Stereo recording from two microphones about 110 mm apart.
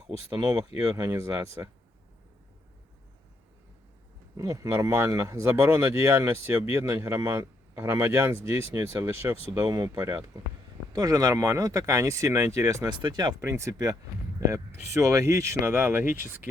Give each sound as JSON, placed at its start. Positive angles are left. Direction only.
{"t": 0.3, "sound": "speech", "side_deg": -30}
{"t": 4.4, "sound": "speech", "side_deg": -30}
{"t": 5.6, "sound": "speech", "side_deg": -15}
{"t": 13.4, "sound": "speech", "side_deg": -25}
{"t": 14.9, "sound": "speech", "side_deg": -30}